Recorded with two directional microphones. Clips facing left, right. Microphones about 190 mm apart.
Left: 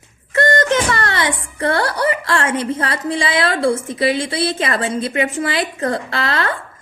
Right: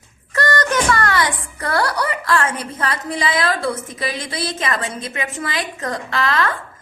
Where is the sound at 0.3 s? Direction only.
25° left (ahead or behind).